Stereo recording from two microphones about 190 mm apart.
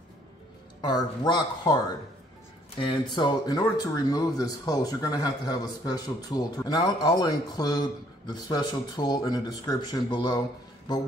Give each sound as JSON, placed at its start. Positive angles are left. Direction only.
{"t": 0.7, "sound": "speech", "side_deg": 20}
{"t": 2.8, "sound": "speech", "side_deg": 25}